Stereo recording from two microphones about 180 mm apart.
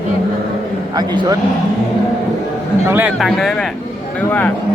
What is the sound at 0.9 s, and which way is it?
Speech, 25° right (ahead or behind).